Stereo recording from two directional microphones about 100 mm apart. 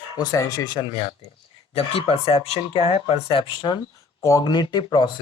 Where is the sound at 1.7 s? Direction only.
75° left (ahead or behind); by 3.8 s 55° left (ahead or behind).